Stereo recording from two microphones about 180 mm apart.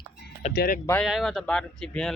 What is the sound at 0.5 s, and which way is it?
Speech, 55° left (ahead or behind).